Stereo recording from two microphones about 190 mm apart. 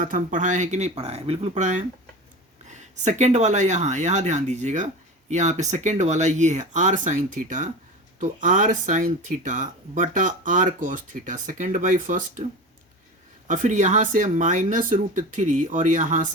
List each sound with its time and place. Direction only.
0.0 s speech: 45° right (ahead or behind)
13.5 s speech: 40° right (ahead or behind)